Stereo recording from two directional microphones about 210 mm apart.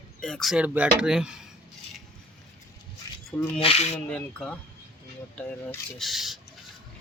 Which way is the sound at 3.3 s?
5° left (ahead or behind).